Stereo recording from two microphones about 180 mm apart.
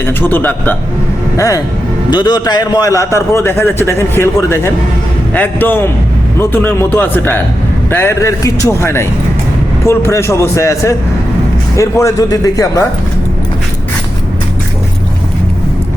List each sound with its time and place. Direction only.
0.0 s a man's voice: 10° left (ahead or behind)